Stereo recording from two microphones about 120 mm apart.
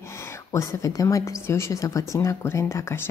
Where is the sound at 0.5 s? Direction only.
25° left (ahead or behind).